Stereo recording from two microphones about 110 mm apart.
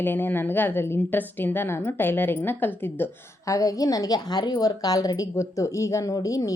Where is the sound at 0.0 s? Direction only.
15° left (ahead or behind).